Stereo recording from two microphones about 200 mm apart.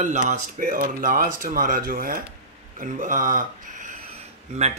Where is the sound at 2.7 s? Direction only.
40° right (ahead or behind).